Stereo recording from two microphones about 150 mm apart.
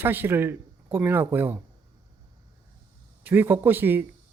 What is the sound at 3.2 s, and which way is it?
Speech, 15° right (ahead or behind).